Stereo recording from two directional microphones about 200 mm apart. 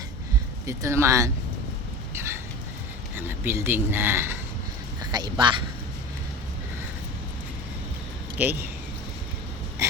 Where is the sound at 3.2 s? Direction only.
10° right (ahead or behind).